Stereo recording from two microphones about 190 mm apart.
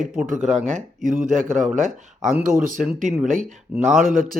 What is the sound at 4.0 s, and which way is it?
Speech, 45° right (ahead or behind).